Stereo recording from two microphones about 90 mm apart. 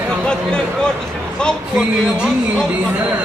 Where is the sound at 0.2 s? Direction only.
10° left (ahead or behind).